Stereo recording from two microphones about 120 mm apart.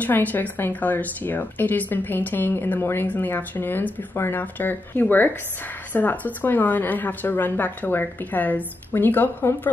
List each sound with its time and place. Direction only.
0.0 s speech: 15° left (ahead or behind)